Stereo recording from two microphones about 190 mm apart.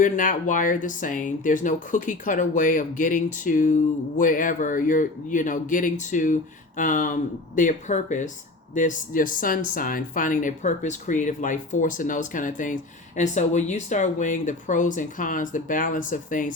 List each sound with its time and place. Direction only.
0.0 s speech: 45° left (ahead or behind)